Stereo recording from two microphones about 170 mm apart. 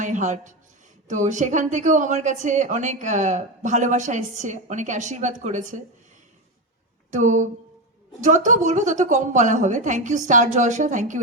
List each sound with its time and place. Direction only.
0.0 s a woman's voice: 45° right (ahead or behind)
7.1 s a woman's voice: 45° right (ahead or behind)